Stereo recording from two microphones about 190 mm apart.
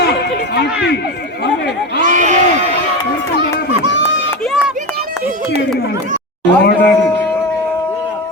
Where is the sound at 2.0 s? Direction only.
40° right (ahead or behind).